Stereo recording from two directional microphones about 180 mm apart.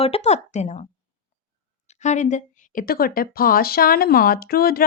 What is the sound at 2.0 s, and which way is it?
A woman's voice, 40° left (ahead or behind).